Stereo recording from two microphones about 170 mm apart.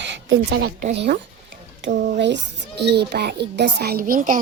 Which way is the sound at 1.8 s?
90° right.